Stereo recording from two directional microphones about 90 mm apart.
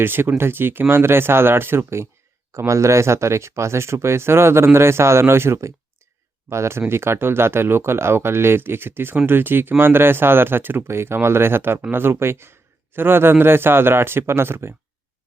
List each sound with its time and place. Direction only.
0.0 s speech: 25° right (ahead or behind)